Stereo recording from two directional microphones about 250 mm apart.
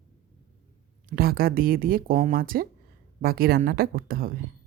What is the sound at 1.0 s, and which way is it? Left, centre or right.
Speech, right.